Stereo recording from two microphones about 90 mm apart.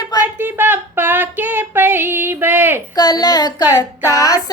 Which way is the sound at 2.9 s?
45° left (ahead or behind).